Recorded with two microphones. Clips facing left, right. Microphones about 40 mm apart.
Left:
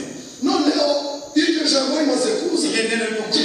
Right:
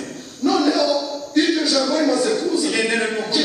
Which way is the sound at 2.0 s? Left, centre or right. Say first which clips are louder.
Right 1 dB; centre.